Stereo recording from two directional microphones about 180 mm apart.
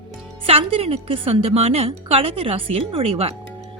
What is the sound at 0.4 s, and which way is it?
A woman's voice, 30° right (ahead or behind).